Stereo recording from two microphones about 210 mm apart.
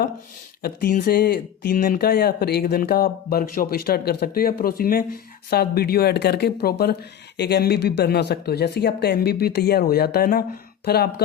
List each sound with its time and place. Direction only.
0.6 s speech: 45° left (ahead or behind)